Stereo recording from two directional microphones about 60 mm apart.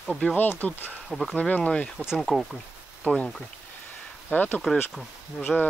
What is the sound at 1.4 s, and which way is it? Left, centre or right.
Speech, left.